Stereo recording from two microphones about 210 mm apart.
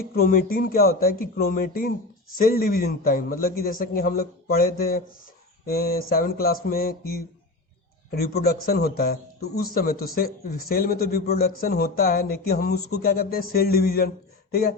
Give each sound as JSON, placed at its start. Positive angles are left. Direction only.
{"t": 0.0, "sound": "speech", "side_deg": 45}